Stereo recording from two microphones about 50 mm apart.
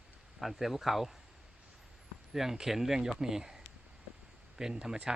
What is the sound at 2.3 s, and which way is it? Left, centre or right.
Speech, centre.